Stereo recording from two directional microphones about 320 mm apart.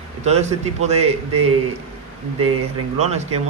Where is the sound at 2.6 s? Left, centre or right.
Right.